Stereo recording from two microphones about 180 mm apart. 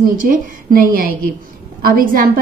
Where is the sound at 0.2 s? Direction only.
50° right (ahead or behind).